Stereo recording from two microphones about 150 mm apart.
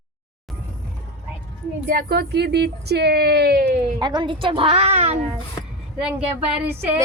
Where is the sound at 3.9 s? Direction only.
30° right (ahead or behind); by 5.1 s 45° right (ahead or behind).